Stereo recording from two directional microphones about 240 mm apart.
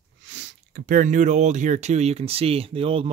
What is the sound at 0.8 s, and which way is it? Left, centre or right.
Speech, right.